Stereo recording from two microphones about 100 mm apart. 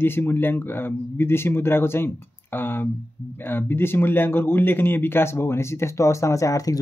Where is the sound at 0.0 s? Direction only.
20° left (ahead or behind).